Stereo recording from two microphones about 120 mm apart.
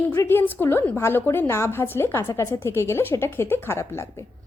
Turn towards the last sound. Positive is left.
turn(degrees=25)  # may be behind; listen again after turning